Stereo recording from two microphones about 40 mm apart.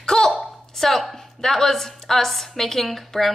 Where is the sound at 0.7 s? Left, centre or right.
Centre.